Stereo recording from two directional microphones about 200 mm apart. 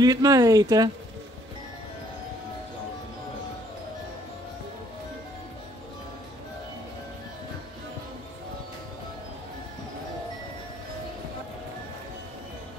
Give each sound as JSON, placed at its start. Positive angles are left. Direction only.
{"t": 0.0, "sound": "speech", "side_deg": -20}